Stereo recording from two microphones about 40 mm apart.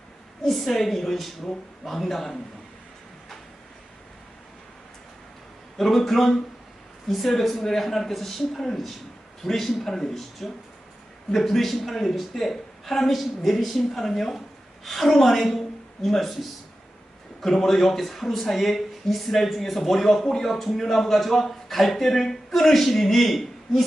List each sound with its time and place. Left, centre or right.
0.4 s speech: centre
5.7 s speech: centre